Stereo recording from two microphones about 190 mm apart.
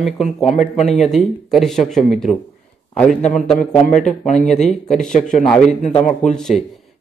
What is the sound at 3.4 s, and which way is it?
A man's voice, 5° left (ahead or behind).